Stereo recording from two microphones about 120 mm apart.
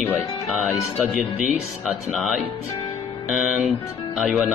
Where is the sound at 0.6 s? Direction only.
5° right (ahead or behind).